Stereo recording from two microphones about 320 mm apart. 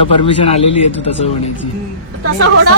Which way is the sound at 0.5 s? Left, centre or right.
Centre.